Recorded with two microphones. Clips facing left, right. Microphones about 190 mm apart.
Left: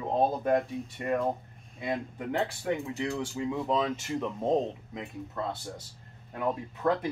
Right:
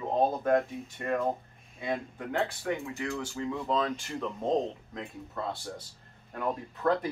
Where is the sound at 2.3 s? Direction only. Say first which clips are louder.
Left 1 dB; 25° left (ahead or behind).